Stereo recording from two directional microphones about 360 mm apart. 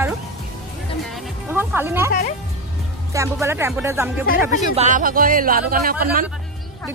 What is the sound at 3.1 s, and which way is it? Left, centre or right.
Speech, centre.